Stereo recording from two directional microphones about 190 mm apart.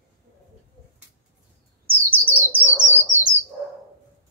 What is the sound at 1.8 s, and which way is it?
Bird, 10° right (ahead or behind).